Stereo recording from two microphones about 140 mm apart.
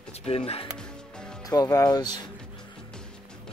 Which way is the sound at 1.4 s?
25° left (ahead or behind).